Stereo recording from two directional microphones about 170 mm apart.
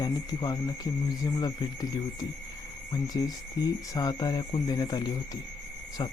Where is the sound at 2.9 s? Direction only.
20° left (ahead or behind).